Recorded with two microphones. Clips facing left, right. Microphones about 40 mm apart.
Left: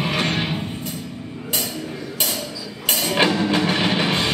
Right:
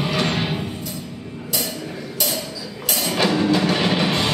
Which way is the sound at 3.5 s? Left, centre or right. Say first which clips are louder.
Right 1 dB; left.